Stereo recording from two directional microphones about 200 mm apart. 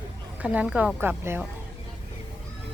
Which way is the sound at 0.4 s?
5° right (ahead or behind).